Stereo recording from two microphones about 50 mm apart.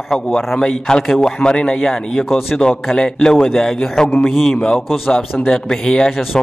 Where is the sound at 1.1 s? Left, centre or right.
Centre.